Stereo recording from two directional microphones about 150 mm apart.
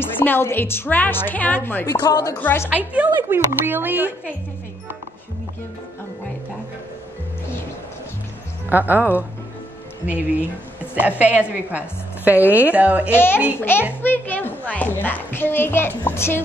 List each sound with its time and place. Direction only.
0.2 s a child's voice: 15° left (ahead or behind)
1.9 s chopping: 25° left (ahead or behind)
2.3 s a child's voice: 15° left (ahead or behind)
2.7 s a woman's voice: 10° right (ahead or behind)
8.6 s a woman's voice: 10° right (ahead or behind)
11.0 s a woman's voice: 10° right (ahead or behind)
13.1 s a child's voice: 15° left (ahead or behind)